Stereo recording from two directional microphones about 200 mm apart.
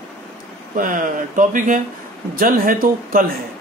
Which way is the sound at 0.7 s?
40° right (ahead or behind).